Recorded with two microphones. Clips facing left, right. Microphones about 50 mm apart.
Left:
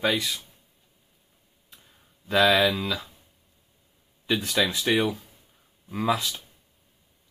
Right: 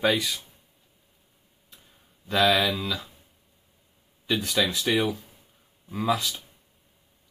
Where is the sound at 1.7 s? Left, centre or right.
Centre.